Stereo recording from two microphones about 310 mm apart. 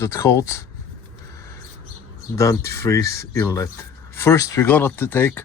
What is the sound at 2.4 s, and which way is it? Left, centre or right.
Speech, centre.